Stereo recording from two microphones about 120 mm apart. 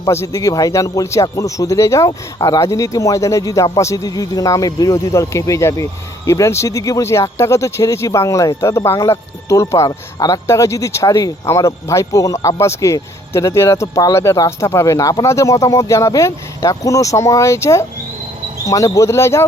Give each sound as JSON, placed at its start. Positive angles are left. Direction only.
{"t": 0.0, "sound": "a man's voice", "side_deg": 25}